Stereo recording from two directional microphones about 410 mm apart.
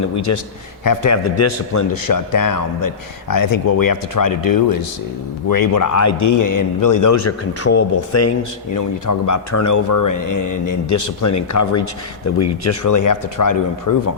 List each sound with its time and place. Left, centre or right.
0.3 s a man's voice: left